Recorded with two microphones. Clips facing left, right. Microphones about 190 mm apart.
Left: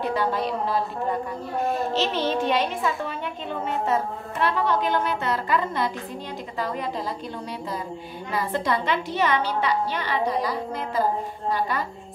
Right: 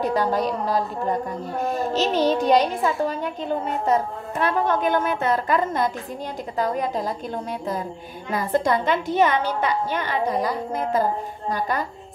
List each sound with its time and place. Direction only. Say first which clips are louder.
0.0 s a child's voice: right 3 dB; 40° right (ahead or behind)
8.3 s a woman's voice: right 4 dB; 45° right (ahead or behind)